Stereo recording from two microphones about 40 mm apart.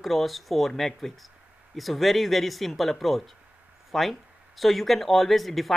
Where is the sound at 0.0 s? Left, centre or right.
Centre.